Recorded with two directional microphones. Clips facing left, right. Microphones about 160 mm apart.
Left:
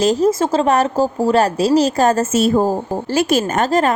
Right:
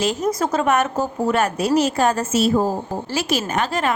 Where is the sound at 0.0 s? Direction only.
40° left (ahead or behind).